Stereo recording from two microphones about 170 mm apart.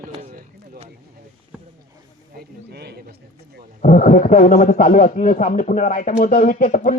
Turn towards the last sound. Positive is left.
turn(degrees=50)  # may be behind; listen again after turning